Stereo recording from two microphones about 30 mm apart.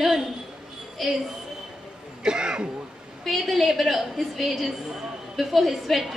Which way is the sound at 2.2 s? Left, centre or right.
Right.